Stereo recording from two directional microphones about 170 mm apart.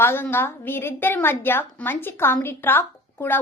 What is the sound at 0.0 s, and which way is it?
A woman's voice, 15° left (ahead or behind).